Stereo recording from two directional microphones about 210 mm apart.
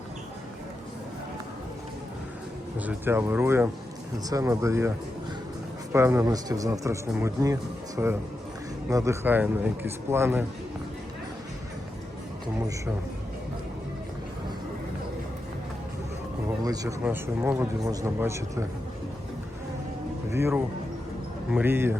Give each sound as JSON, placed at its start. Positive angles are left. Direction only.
{"t": 2.7, "sound": "a man's voice", "side_deg": -10}
{"t": 5.9, "sound": "a man's voice", "side_deg": -15}
{"t": 16.6, "sound": "a man's voice", "side_deg": -15}
{"t": 20.3, "sound": "a man's voice", "side_deg": -10}